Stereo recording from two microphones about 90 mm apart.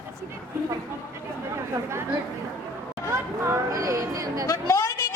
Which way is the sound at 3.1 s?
35° right (ahead or behind).